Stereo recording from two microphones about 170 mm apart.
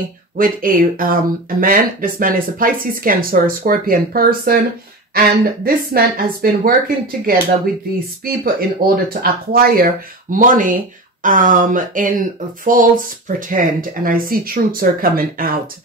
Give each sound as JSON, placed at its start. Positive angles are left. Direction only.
{"t": 0.4, "sound": "speech", "side_deg": -55}
{"t": 10.3, "sound": "speech", "side_deg": -50}